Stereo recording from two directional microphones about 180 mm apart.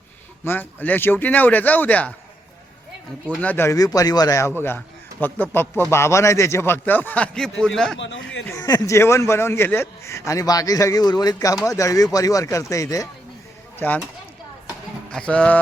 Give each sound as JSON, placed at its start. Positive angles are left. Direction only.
{"t": 0.4, "sound": "a man's voice", "side_deg": 10}
{"t": 3.2, "sound": "a man's voice", "side_deg": 10}
{"t": 7.9, "sound": "speech", "side_deg": 90}
{"t": 8.4, "sound": "a man's voice", "side_deg": 20}
{"t": 15.1, "sound": "a man's voice", "side_deg": 5}